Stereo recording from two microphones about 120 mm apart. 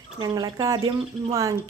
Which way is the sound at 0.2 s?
35° right (ahead or behind).